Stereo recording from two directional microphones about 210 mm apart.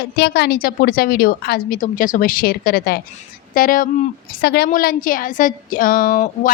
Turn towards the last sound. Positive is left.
turn(degrees=40)  # may be behind; listen again after turning